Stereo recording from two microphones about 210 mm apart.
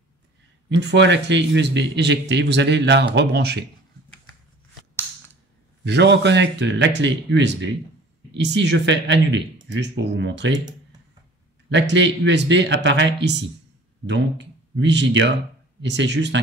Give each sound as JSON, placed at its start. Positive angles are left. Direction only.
{"t": 0.7, "sound": "speech", "side_deg": -55}
{"t": 5.9, "sound": "speech", "side_deg": -55}
{"t": 11.7, "sound": "speech", "side_deg": -55}
{"t": 14.8, "sound": "speech", "side_deg": -55}